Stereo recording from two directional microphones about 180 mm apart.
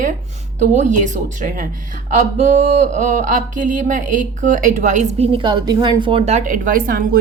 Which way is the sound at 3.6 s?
45° right (ahead or behind).